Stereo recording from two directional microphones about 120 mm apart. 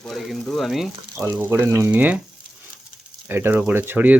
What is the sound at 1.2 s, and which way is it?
Speech, 20° right (ahead or behind).